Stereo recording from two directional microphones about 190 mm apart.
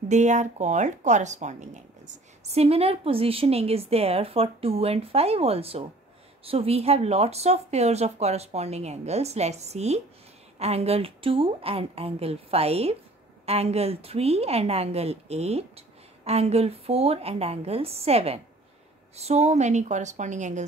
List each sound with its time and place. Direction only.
0.1 s speech: 40° right (ahead or behind)